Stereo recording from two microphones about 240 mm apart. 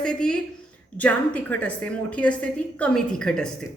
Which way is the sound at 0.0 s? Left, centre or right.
Centre.